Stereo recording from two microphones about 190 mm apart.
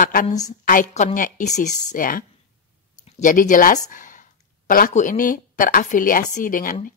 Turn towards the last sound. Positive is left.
turn(degrees=45)  # may be behind; listen again after turning